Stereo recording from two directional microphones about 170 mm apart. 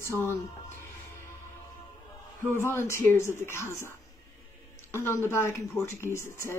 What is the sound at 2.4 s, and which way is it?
Speech, 15° left (ahead or behind).